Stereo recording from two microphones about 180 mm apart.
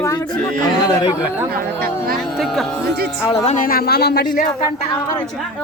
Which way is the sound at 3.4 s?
45° left (ahead or behind).